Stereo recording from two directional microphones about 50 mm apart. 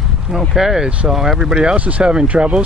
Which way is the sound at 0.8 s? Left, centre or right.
Right.